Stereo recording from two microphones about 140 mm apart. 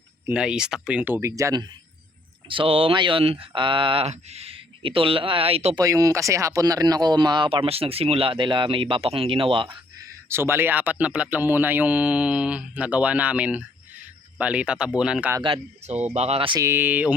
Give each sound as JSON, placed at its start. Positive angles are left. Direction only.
{"t": 0.3, "sound": "speech", "side_deg": -5}
{"t": 2.5, "sound": "speech", "side_deg": -40}
{"t": 5.7, "sound": "speech", "side_deg": -25}
{"t": 10.2, "sound": "speech", "side_deg": -15}
{"t": 15.4, "sound": "speech", "side_deg": -40}
{"t": 16.6, "sound": "speech", "side_deg": -15}